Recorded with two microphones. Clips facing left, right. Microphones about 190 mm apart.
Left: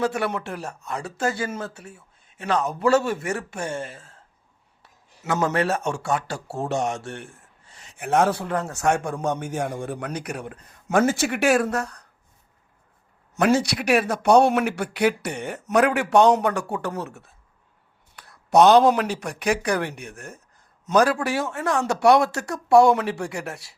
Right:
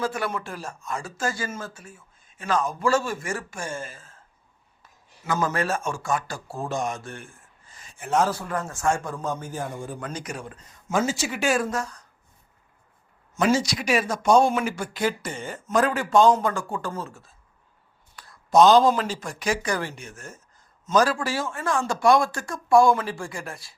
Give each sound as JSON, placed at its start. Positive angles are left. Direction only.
{"t": 0.0, "sound": "a man's voice", "side_deg": 70}
{"t": 13.3, "sound": "a man's voice", "side_deg": 60}